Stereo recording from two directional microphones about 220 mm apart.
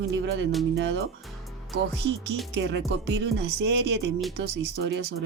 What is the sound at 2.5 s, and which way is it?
Speech, 50° right (ahead or behind).